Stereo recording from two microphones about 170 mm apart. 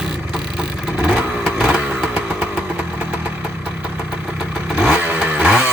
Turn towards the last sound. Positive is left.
turn(degrees=-10)  # may be behind; listen again after turning